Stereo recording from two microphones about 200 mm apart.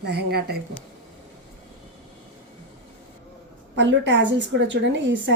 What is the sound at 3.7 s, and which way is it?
A woman's voice, 60° right (ahead or behind).